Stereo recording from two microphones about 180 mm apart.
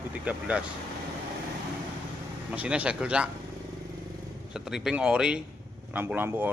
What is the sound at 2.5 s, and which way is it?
Speech, 5° right (ahead or behind).